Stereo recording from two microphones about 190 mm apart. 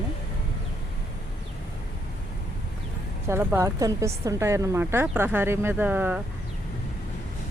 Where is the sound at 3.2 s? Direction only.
15° right (ahead or behind).